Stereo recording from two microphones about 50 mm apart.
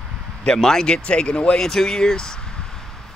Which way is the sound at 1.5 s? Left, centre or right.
Centre.